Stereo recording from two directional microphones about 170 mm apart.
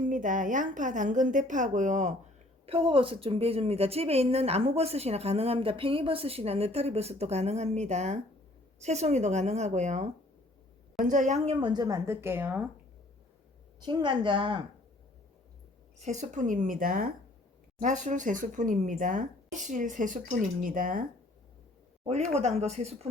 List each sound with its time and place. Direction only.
0.0 s speech: 50° right (ahead or behind)
2.6 s a woman's voice: 30° right (ahead or behind)
11.6 s a woman's voice: 25° right (ahead or behind)
13.8 s a woman's voice: 25° right (ahead or behind)
16.0 s speech: 45° right (ahead or behind)
22.0 s a woman's voice: 40° right (ahead or behind)